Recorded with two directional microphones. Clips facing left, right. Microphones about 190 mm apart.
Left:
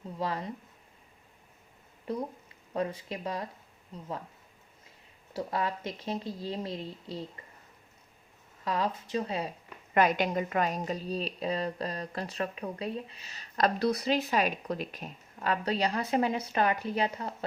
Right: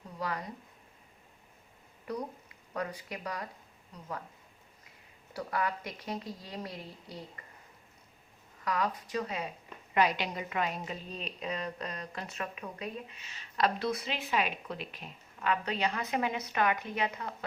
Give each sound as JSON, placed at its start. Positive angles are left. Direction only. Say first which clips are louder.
{"t": 0.2, "sound": "a woman's voice", "louder": "left 3 dB", "side_deg": 25}
{"t": 2.7, "sound": "a woman's voice", "louder": "left 5 dB", "side_deg": 25}
{"t": 5.3, "sound": "a woman's voice", "louder": "left 2 dB", "side_deg": 25}
{"t": 8.6, "sound": "a woman's voice", "louder": "left 2 dB", "side_deg": 30}
{"t": 9.9, "sound": "a woman's voice", "louder": "left 4 dB", "side_deg": 50}